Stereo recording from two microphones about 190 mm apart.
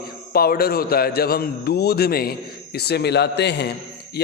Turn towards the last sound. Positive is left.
turn(degrees=60)  # may be behind; listen again after turning